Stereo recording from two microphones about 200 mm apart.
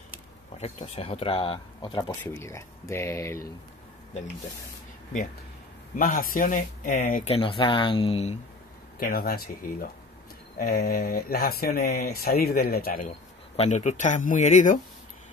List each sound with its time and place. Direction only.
0.6 s speech: 30° left (ahead or behind); by 3.4 s 15° left (ahead or behind)
5.9 s speech: 45° left (ahead or behind)
7.3 s speech: 25° left (ahead or behind)
9.0 s speech: 50° left (ahead or behind)
13.6 s speech: 35° left (ahead or behind)